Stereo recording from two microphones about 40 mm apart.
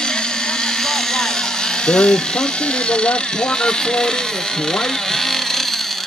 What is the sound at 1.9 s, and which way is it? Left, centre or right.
Speech, left.